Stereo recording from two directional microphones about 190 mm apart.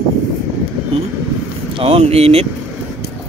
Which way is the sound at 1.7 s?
30° right (ahead or behind).